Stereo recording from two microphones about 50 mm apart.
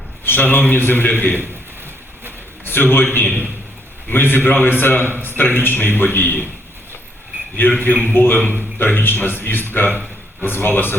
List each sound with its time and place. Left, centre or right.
0.3 s a man's voice: left
2.6 s a man's voice: left
7.7 s a man's voice: left